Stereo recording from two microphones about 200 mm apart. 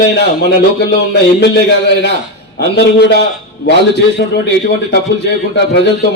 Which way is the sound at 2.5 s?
55° left (ahead or behind).